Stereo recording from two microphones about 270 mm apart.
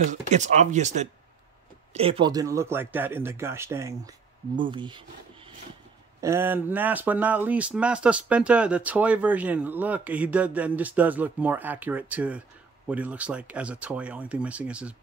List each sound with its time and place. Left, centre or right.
0.1 s speech: right
6.2 s speech: centre